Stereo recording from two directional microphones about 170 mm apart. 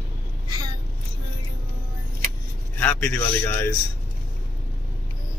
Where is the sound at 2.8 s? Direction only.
5° left (ahead or behind).